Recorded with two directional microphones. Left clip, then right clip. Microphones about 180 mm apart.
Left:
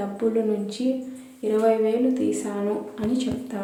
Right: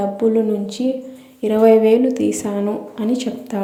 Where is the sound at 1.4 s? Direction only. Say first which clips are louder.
Right 8 dB; 40° right (ahead or behind).